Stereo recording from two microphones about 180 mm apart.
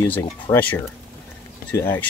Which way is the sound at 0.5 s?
10° left (ahead or behind).